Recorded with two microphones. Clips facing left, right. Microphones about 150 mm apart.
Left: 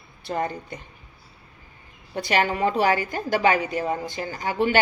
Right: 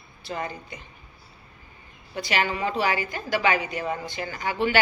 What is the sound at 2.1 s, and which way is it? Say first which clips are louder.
A woman's voice: left 3 dB; 45° left (ahead or behind).